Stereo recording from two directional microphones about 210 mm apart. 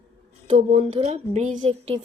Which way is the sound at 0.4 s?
30° right (ahead or behind).